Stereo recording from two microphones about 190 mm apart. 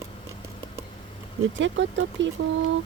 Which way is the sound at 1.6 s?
75° right (ahead or behind).